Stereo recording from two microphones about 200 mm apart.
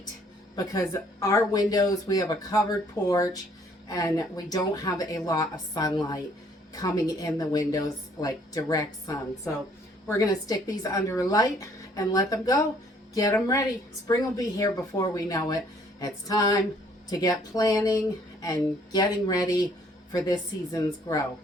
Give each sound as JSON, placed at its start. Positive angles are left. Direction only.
{"t": 0.5, "sound": "a woman's voice", "side_deg": 15}